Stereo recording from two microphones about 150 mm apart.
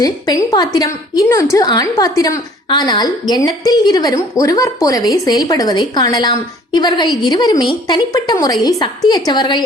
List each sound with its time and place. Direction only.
0.0 s a woman's voice: 25° left (ahead or behind)